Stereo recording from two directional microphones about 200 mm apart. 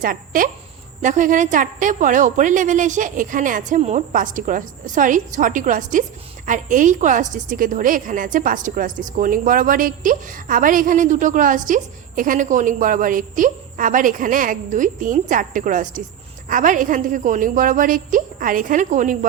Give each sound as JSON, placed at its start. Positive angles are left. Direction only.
{"t": 0.0, "sound": "a woman's voice", "side_deg": -45}